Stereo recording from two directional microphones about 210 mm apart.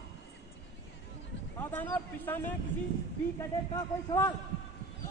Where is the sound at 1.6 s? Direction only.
10° left (ahead or behind).